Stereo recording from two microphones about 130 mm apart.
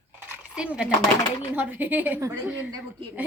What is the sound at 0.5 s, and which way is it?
A woman's voice, 10° right (ahead or behind).